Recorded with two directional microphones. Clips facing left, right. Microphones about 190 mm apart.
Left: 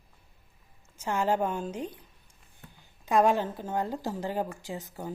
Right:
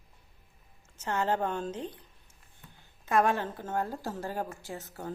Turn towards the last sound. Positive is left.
turn(degrees=15)  # may be behind; listen again after turning